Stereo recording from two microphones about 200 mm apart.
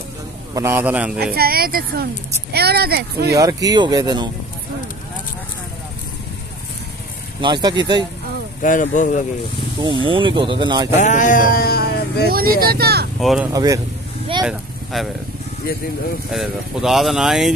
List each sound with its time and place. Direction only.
0.6 s a man's voice: 10° right (ahead or behind)
1.2 s speech: 50° right (ahead or behind)
3.3 s speech: 15° right (ahead or behind)
7.4 s speech: 20° right (ahead or behind)
8.6 s speech: 40° left (ahead or behind)
9.8 s speech: 25° right (ahead or behind)
11.0 s sheep: 40° left (ahead or behind)
12.3 s speech: 50° right (ahead or behind)
13.2 s speech: centre (ahead or behind)
13.5 s a man's voice: 15° right (ahead or behind)
14.4 s vehicle: centre (ahead or behind)
16.3 s speech: centre (ahead or behind)